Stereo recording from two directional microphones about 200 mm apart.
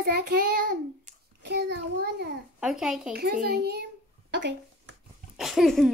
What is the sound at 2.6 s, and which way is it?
Child singing, 5° right (ahead or behind).